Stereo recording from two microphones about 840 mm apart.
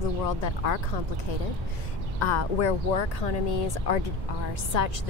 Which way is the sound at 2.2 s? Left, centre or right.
Left.